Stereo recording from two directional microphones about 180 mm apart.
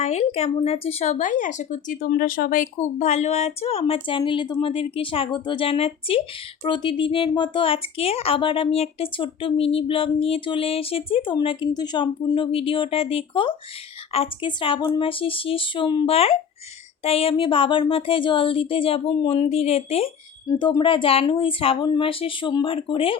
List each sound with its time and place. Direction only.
0.0 s speech: 40° left (ahead or behind)
20.5 s speech: 25° left (ahead or behind)